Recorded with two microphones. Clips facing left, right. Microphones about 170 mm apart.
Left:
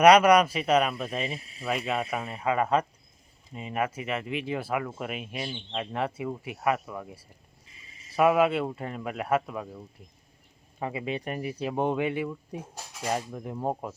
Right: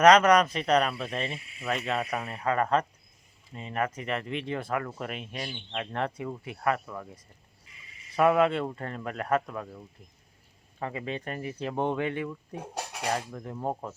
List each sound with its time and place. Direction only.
0.0 s speech: 10° left (ahead or behind)
1.4 s speech: 35° left (ahead or behind)
1.6 s speech: 5° left (ahead or behind)
7.7 s a sound: 30° left (ahead or behind)
8.1 s speech: 5° left (ahead or behind)
12.5 s speech: 70° right (ahead or behind)
13.1 s speech: 15° left (ahead or behind)